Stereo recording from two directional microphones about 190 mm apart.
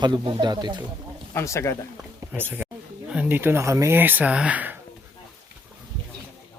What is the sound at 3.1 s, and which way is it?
Speech, 10° right (ahead or behind).